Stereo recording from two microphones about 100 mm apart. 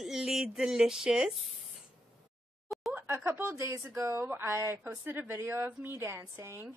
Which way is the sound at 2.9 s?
15° right (ahead or behind).